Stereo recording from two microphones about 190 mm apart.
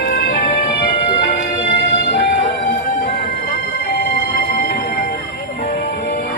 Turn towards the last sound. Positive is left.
turn(degrees=55)  # may be behind; listen again after turning